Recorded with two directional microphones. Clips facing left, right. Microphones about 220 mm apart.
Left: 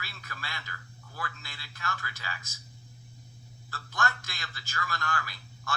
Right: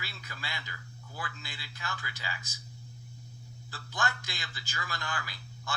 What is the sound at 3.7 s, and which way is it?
Speech, 15° right (ahead or behind).